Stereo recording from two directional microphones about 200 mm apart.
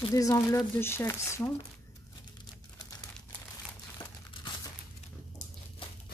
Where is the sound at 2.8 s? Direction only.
20° left (ahead or behind).